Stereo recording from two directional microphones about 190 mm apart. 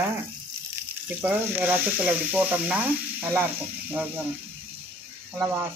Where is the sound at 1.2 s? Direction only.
10° right (ahead or behind).